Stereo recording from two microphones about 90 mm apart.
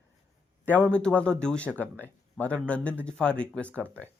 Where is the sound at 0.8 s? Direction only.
10° left (ahead or behind).